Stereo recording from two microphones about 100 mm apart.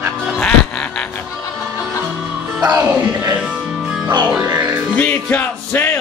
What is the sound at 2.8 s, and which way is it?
Speech, 25° right (ahead or behind).